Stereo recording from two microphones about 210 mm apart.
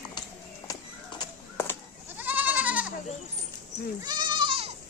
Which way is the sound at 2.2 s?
10° right (ahead or behind).